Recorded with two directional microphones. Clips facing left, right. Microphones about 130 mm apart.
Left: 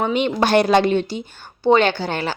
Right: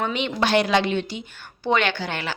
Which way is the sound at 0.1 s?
40° left (ahead or behind).